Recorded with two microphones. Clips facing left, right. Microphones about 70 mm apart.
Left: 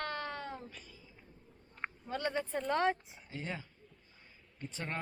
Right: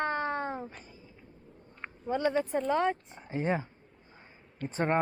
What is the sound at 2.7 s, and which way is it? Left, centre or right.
Speech, centre.